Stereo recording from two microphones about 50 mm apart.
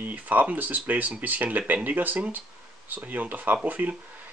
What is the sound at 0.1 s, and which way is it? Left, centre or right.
Speech, right.